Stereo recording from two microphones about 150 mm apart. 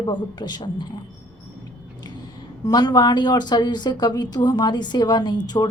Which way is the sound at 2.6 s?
25° left (ahead or behind).